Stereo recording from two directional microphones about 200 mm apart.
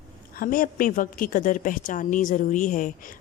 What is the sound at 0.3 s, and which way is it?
Speech, 45° left (ahead or behind).